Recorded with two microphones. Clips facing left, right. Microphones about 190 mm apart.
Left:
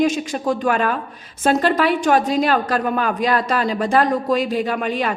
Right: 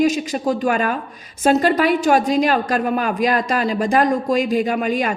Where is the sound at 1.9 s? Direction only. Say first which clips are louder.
Right 1 dB; 10° right (ahead or behind).